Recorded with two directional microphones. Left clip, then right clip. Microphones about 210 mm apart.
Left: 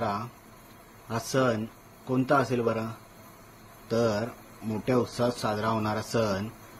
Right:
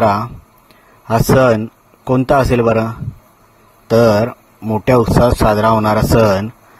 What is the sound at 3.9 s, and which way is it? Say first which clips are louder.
A man's voice: right 16 dB; 45° right (ahead or behind).